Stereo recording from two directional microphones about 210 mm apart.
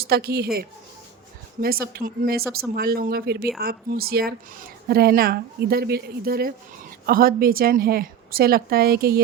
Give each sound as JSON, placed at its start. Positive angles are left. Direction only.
{"t": 0.0, "sound": "speech", "side_deg": -45}
{"t": 1.6, "sound": "speech", "side_deg": -45}